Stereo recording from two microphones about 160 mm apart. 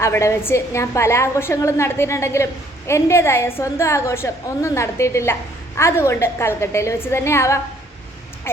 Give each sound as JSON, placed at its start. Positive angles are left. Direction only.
{"t": 0.0, "sound": "a woman's voice", "side_deg": 15}